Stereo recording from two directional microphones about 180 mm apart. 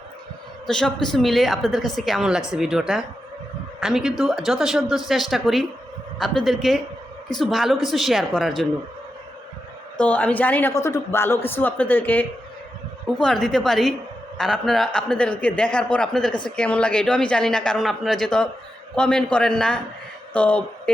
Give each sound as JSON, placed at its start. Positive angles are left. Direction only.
{"t": 0.7, "sound": "a man's voice", "side_deg": 5}
{"t": 10.0, "sound": "a man's voice", "side_deg": 10}